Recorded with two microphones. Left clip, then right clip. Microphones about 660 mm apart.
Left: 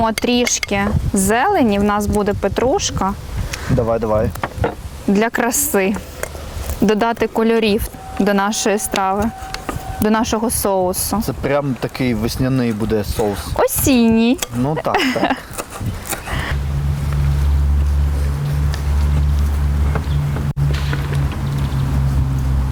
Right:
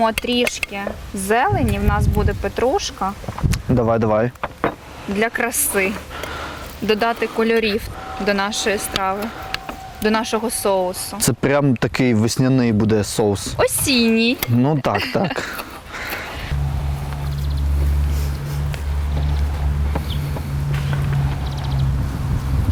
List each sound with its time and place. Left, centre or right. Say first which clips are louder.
0.0 s speech: left 1 dB; left
3.5 s speech: left 1 dB; right
5.2 s speech: even; left
10.0 s speech: left 2 dB; left
11.3 s speech: right 3 dB; right
13.6 s speech: left 3 dB; left
14.6 s speech: right 2 dB; right
14.9 s speech: left 4 dB; left